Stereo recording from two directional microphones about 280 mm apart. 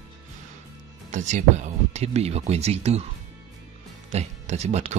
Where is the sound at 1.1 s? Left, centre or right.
Right.